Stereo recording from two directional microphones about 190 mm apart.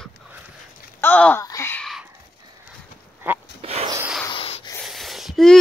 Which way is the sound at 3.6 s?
30° right (ahead or behind).